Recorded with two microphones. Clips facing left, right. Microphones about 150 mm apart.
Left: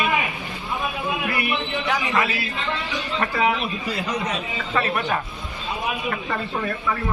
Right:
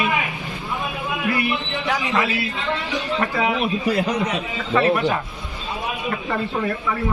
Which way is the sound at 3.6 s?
50° right (ahead or behind).